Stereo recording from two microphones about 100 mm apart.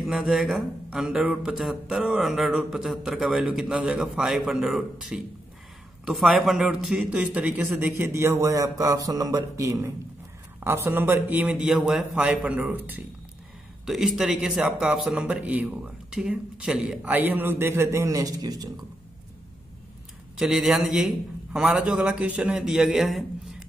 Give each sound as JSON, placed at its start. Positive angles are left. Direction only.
{"t": 0.0, "sound": "speech", "side_deg": 0}
{"t": 8.1, "sound": "speech", "side_deg": -30}
{"t": 13.8, "sound": "speech", "side_deg": -5}
{"t": 17.1, "sound": "a man's voice", "side_deg": -20}
{"t": 20.3, "sound": "speech", "side_deg": -5}